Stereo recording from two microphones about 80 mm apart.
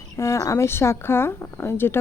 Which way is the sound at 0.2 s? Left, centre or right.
Left.